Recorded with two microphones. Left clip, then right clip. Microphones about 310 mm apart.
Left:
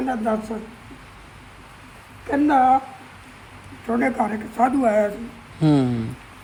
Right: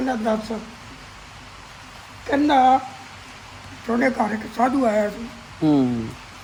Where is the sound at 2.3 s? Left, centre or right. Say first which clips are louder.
Right 1 dB; centre.